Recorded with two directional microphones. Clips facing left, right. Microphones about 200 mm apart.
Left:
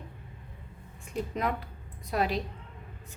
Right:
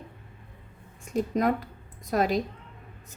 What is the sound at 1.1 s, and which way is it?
A woman's voice, 40° right (ahead or behind).